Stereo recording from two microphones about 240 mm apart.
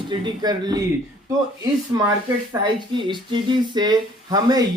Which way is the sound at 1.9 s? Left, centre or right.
Centre.